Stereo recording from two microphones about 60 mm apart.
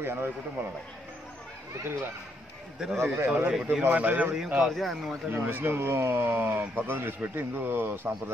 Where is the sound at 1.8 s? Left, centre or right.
Right.